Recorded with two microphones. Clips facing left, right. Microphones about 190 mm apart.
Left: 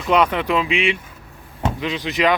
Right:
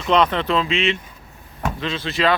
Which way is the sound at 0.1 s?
10° left (ahead or behind).